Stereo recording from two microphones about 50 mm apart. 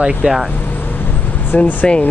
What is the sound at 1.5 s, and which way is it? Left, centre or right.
Speech, left.